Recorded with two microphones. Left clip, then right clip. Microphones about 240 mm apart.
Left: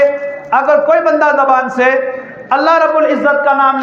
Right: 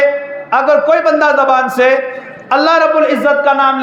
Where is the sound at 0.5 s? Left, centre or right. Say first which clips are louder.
Even; right.